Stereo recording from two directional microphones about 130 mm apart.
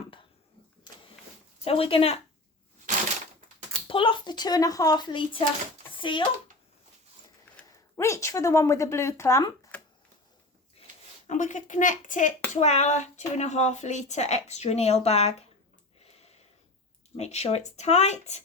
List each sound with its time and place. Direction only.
1.6 s speech: 45° left (ahead or behind)
3.8 s speech: 40° left (ahead or behind)
7.5 s a sound: 15° left (ahead or behind)
7.9 s speech: 20° left (ahead or behind)
11.3 s a woman's voice: 70° left (ahead or behind)
12.5 s a woman's voice: 60° left (ahead or behind)
16.0 s a sound: 55° left (ahead or behind)
17.2 s a woman's voice: 55° left (ahead or behind)